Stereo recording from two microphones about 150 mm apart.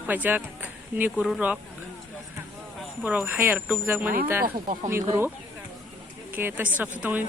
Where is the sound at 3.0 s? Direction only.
10° right (ahead or behind).